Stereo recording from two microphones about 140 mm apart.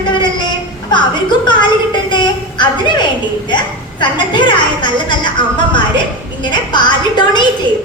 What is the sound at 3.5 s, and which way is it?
A woman's voice, 35° left (ahead or behind).